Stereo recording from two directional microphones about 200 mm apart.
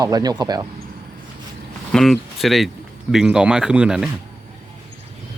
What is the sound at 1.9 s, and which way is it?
Speech, centre (ahead or behind).